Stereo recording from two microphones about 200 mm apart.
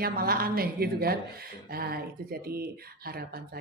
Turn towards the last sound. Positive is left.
turn(degrees=-50)  # may be behind; listen again after turning